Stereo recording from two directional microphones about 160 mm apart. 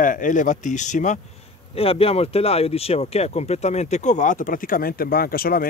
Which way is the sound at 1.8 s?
40° left (ahead or behind).